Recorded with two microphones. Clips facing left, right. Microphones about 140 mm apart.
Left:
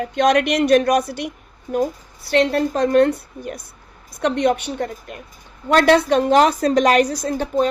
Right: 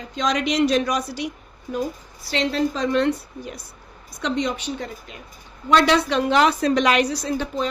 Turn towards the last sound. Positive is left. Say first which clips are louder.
# left 5 dB
turn(degrees=50)  # may be behind; listen again after turning